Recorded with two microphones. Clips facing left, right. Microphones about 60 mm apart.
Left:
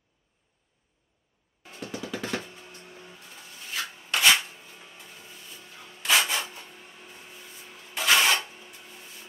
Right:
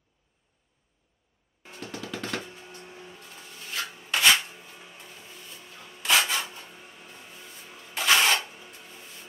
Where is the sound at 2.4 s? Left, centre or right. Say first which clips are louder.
Right 2 dB; right.